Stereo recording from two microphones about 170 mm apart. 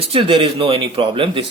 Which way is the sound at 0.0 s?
35° right (ahead or behind).